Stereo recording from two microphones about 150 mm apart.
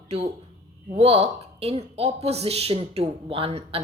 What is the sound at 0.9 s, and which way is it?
A woman's voice, 45° right (ahead or behind).